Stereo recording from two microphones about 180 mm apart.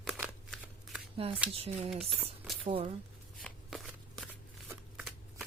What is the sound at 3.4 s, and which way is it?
Shuffling cards, centre (ahead or behind).